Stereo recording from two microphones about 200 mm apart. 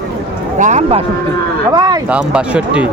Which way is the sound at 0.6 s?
35° right (ahead or behind).